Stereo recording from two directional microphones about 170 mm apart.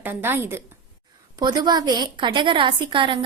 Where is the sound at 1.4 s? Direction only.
25° right (ahead or behind).